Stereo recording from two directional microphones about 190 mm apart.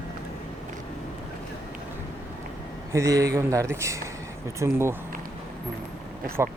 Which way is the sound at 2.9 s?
15° right (ahead or behind).